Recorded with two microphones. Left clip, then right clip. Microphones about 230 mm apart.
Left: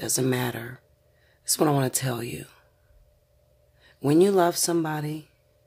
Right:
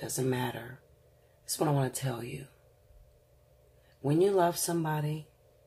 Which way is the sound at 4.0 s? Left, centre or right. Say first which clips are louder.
Left 6 dB; left.